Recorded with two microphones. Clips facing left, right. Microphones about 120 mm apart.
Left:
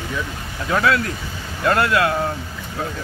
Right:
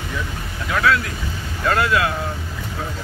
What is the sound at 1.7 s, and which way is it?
Speech, 50° left (ahead or behind).